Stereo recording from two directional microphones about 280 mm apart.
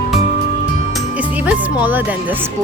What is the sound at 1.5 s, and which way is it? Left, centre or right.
Music, centre.